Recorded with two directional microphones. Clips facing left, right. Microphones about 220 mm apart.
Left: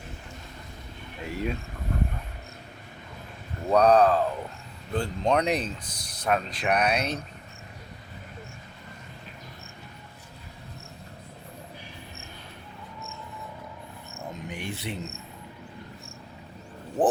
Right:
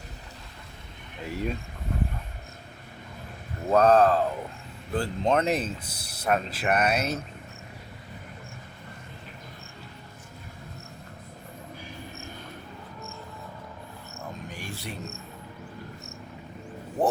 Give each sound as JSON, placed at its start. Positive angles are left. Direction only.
{"t": 1.2, "sound": "speech", "side_deg": 0}
{"t": 3.6, "sound": "speech", "side_deg": -5}
{"t": 14.4, "sound": "a sound", "side_deg": 20}